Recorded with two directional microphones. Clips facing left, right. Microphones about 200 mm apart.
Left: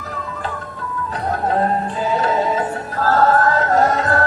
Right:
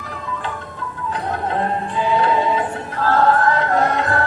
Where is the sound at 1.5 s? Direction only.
40° left (ahead or behind).